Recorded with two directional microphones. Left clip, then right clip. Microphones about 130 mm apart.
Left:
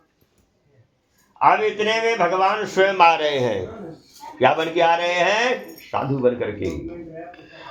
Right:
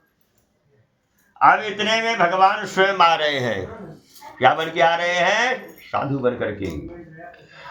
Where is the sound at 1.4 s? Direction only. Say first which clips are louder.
Right 1 dB; 40° left (ahead or behind).